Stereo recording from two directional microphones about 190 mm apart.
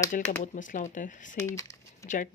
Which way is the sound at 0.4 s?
40° left (ahead or behind).